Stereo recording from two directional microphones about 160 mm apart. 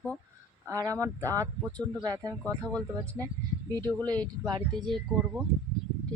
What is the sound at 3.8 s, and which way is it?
Speech, 25° right (ahead or behind).